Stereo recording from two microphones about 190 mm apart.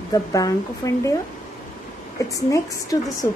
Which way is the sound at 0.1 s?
20° left (ahead or behind).